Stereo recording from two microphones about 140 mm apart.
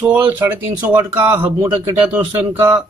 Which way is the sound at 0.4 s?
25° right (ahead or behind).